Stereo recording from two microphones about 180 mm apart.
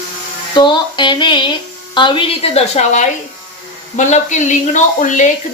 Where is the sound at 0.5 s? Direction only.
25° left (ahead or behind).